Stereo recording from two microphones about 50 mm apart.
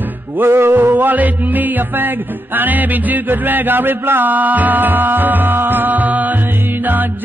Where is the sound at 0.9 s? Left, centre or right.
Right.